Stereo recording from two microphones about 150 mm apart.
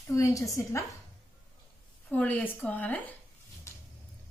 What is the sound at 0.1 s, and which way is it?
Speech, 20° left (ahead or behind).